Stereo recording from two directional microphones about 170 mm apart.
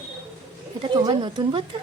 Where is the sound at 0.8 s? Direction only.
30° right (ahead or behind).